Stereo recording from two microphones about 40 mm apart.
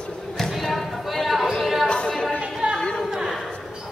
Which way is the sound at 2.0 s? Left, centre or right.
Centre.